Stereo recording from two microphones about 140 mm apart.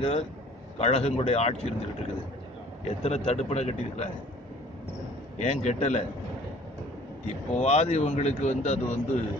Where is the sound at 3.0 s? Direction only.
50° left (ahead or behind).